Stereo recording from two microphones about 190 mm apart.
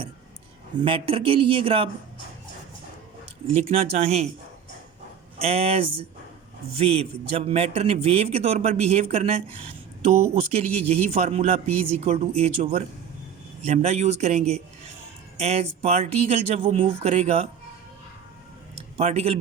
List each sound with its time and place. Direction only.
0.8 s speech: 30° right (ahead or behind)
3.5 s a man's voice: 35° right (ahead or behind)
5.4 s a man's voice: 30° right (ahead or behind)
18.9 s a man's voice: 35° right (ahead or behind)